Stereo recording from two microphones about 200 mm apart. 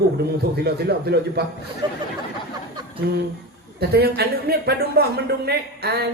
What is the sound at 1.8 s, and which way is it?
Speech, 20° right (ahead or behind).